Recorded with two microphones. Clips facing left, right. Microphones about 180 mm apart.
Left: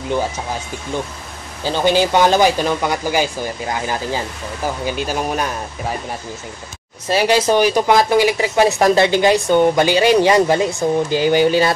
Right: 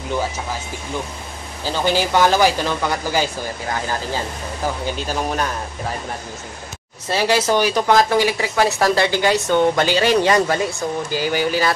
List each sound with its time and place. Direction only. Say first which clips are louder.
1.6 s speech: left 4 dB; 20° left (ahead or behind)
4.8 s speech: left 2 dB; 10° left (ahead or behind)
7.1 s speech: left 3 dB; 15° left (ahead or behind)